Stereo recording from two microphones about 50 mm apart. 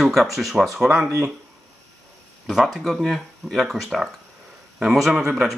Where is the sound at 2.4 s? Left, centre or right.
Centre.